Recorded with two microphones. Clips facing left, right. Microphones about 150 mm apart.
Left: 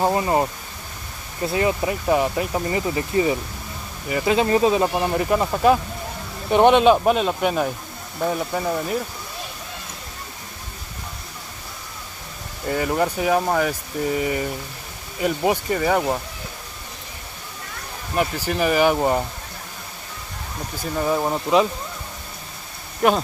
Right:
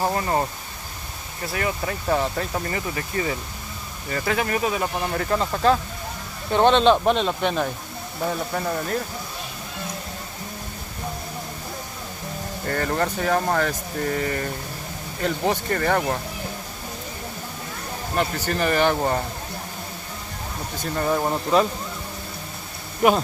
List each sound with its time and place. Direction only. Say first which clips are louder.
0.0 s speech: left 3 dB; 20° left (ahead or behind)
12.6 s speech: left 3 dB; 10° left (ahead or behind)
18.1 s speech: left 2 dB; 10° left (ahead or behind)
20.8 s speech: left 1 dB; 5° left (ahead or behind)